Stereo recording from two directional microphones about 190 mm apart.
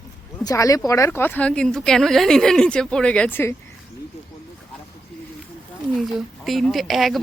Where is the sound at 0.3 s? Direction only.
15° left (ahead or behind).